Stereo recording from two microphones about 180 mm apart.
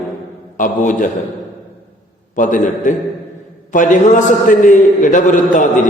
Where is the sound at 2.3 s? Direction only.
45° left (ahead or behind).